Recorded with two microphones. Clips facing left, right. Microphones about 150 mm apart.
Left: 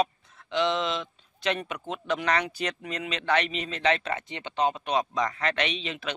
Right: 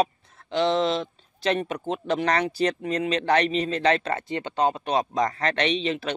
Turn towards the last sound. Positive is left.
turn(degrees=-35)  # may be behind; listen again after turning